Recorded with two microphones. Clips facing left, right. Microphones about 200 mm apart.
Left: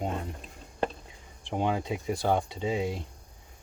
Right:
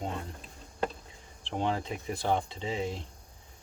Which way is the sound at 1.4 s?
15° left (ahead or behind).